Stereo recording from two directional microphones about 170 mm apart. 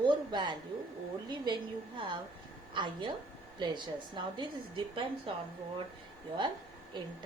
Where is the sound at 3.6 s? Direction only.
25° right (ahead or behind).